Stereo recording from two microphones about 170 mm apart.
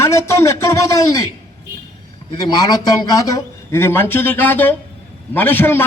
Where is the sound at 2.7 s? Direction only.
20° left (ahead or behind).